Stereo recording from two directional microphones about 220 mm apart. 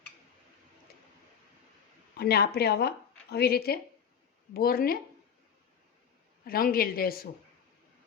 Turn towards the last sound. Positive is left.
turn(degrees=45)  # may be behind; listen again after turning